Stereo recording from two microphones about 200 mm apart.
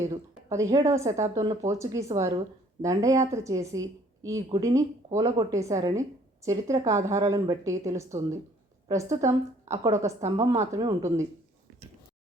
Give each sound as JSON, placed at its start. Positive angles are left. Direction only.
{"t": 0.4, "sound": "a woman's voice", "side_deg": -15}